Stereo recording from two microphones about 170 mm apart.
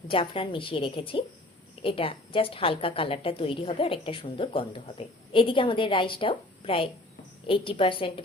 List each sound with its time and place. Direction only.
0.1 s a woman's voice: 30° left (ahead or behind)